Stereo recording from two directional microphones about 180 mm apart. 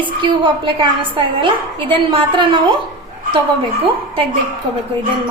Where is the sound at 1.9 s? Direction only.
30° right (ahead or behind).